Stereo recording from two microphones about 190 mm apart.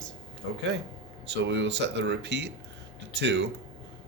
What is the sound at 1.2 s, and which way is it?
Speech, 70° right (ahead or behind).